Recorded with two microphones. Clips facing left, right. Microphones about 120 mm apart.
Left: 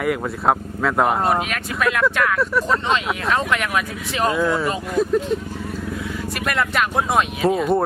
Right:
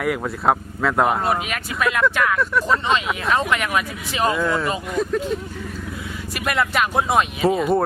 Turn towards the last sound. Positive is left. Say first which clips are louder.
# even
turn(degrees=0)  # may be behind; listen again after turning